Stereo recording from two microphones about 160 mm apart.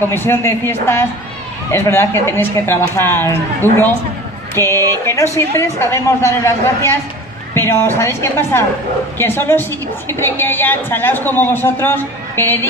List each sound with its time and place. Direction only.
0.1 s a woman's voice: 15° left (ahead or behind)